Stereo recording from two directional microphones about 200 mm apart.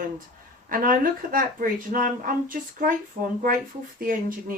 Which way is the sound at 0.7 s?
45° right (ahead or behind).